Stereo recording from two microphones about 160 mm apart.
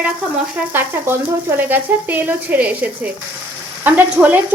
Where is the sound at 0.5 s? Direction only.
15° right (ahead or behind).